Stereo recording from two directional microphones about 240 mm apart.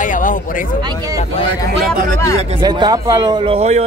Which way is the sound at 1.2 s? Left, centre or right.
Left.